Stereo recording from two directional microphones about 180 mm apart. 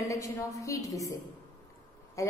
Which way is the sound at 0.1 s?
20° left (ahead or behind).